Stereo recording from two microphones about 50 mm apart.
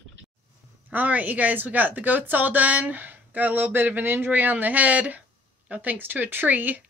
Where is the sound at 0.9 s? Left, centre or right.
Right.